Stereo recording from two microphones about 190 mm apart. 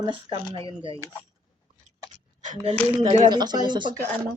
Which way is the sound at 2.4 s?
40° right (ahead or behind).